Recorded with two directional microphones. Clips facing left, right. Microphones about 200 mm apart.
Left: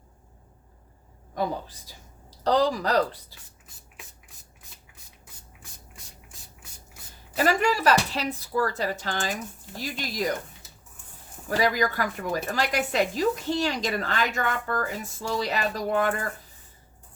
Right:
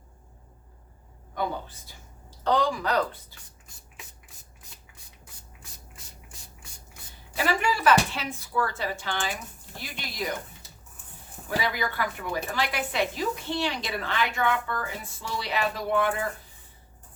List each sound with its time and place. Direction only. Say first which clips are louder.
2.4 s a woman's voice: left 2 dB; 35° left (ahead or behind)
7.3 s a woman's voice: left 4 dB; 40° left (ahead or behind)
11.4 s a woman's voice: left 5 dB; 40° left (ahead or behind)